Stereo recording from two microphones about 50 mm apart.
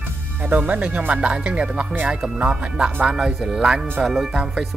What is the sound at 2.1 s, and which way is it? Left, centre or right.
Speech, centre.